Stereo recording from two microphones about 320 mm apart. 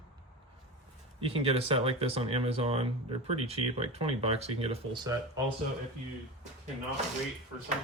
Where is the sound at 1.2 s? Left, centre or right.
Centre.